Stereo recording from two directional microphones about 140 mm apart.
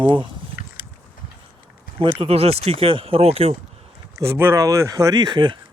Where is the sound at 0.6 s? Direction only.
90° left.